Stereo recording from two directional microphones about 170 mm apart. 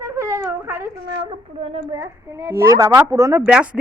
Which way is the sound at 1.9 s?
15° right (ahead or behind).